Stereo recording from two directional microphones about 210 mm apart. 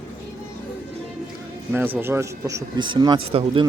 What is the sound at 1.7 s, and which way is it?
Speech, 10° right (ahead or behind).